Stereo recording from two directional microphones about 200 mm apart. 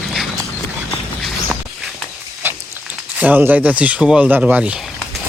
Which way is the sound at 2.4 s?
10° right (ahead or behind).